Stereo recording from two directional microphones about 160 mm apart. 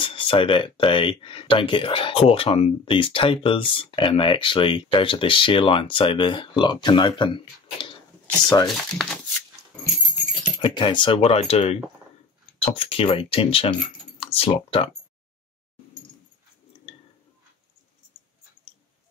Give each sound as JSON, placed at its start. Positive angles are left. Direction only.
{"t": 0.0, "sound": "speech", "side_deg": 35}
{"t": 8.6, "sound": "speech", "side_deg": 0}
{"t": 9.7, "sound": "dog", "side_deg": 10}
{"t": 10.6, "sound": "speech", "side_deg": 30}
{"t": 18.1, "sound": "a sound", "side_deg": -5}